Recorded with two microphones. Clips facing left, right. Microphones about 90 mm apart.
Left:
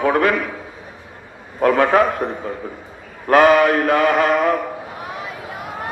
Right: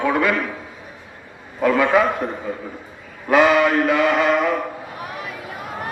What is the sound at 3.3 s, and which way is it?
Mantra, 45° left (ahead or behind).